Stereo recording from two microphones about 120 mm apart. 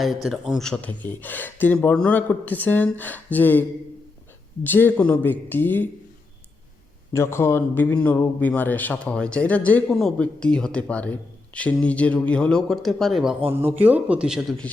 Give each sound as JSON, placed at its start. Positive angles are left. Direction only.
{"t": 0.0, "sound": "speech", "side_deg": 0}
{"t": 7.1, "sound": "speech", "side_deg": 20}
{"t": 13.5, "sound": "speech", "side_deg": -20}